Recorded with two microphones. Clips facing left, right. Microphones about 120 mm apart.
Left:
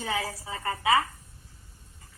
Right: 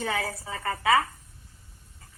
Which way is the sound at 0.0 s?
40° right (ahead or behind).